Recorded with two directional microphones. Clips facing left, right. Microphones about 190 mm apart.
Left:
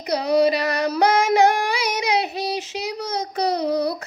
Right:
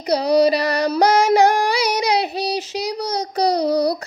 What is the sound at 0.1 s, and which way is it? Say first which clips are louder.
Female singing: right 3 dB; 35° right (ahead or behind).